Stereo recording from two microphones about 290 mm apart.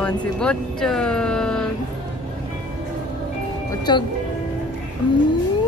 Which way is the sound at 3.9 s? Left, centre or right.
Centre.